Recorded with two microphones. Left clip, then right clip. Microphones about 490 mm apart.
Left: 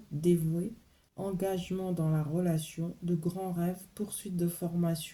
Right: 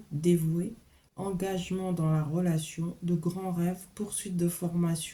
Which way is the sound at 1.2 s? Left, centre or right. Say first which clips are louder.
Even; left.